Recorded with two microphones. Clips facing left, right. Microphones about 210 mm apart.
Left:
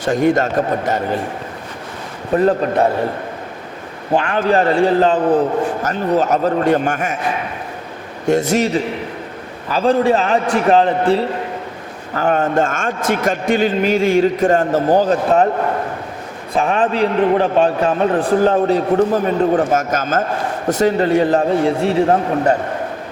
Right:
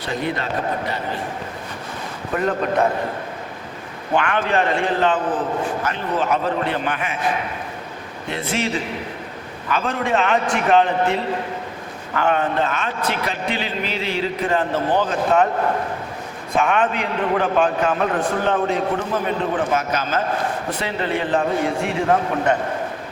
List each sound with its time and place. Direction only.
0.0 s a man's voice: 45° left (ahead or behind)
2.3 s a man's voice: 35° left (ahead or behind)
4.1 s a man's voice: 35° left (ahead or behind)
6.1 s a man's voice: 40° left (ahead or behind)
8.3 s a man's voice: 45° left (ahead or behind)
16.6 s a man's voice: 35° left (ahead or behind)